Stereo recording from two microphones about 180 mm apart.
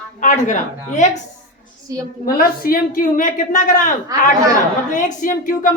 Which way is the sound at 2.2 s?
55° left (ahead or behind).